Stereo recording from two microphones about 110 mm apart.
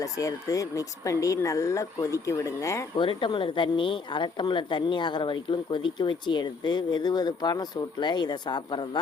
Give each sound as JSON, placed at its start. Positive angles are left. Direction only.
{"t": 0.0, "sound": "speech", "side_deg": 30}
{"t": 2.9, "sound": "a woman's voice", "side_deg": 50}